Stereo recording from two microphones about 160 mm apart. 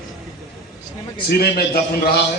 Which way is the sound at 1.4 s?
80° left.